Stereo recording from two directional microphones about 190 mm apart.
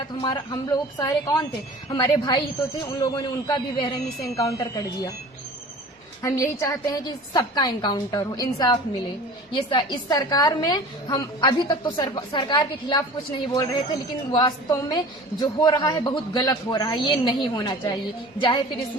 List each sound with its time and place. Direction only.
0.2 s a woman's voice: 20° left (ahead or behind)
6.2 s a woman's voice: 15° left (ahead or behind)